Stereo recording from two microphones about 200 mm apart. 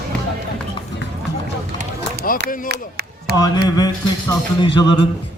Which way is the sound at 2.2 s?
45° left (ahead or behind).